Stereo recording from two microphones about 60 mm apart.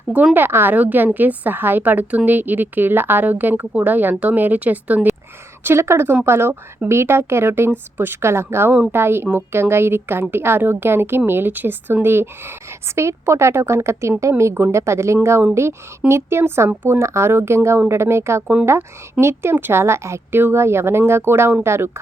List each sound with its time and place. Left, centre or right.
0.3 s a woman's voice: right
5.6 s a woman's voice: right
16.6 s a woman's voice: right
17.0 s a woman's voice: right